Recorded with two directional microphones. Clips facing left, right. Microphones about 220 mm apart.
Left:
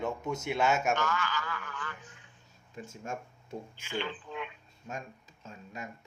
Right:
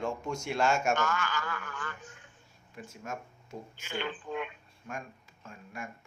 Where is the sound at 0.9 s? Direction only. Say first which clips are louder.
Right 1 dB; 50° right (ahead or behind).